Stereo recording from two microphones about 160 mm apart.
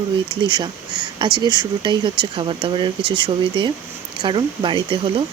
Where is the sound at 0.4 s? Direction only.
30° right (ahead or behind).